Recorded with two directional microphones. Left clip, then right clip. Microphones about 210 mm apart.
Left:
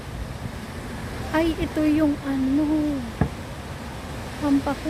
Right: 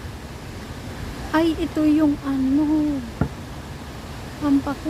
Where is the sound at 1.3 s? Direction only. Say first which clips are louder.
Right 3 dB; 20° right (ahead or behind).